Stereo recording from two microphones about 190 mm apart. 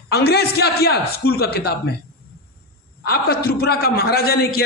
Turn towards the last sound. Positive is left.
turn(degrees=55)  # may be behind; listen again after turning